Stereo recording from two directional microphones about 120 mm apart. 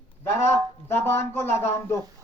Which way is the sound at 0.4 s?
20° left (ahead or behind).